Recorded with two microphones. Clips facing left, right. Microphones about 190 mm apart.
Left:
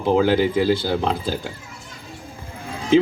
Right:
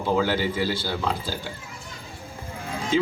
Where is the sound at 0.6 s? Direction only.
50° left (ahead or behind).